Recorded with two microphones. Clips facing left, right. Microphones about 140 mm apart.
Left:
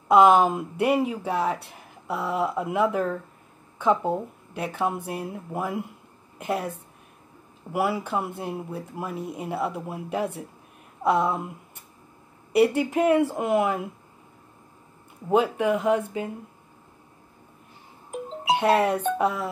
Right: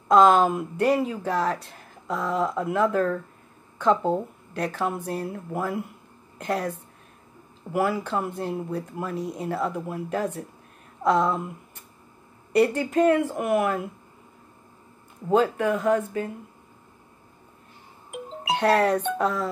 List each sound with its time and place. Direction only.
0.1 s a woman's voice: 15° left (ahead or behind)
7.7 s a woman's voice: 10° left (ahead or behind)
12.5 s a woman's voice: 10° left (ahead or behind)
15.2 s a woman's voice: 10° left (ahead or behind)
18.5 s a woman's voice: 10° left (ahead or behind)